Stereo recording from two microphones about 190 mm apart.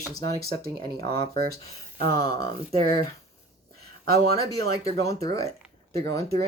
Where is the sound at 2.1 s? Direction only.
20° left (ahead or behind).